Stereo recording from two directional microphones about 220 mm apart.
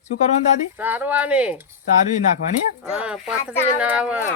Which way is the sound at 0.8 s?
10° right (ahead or behind).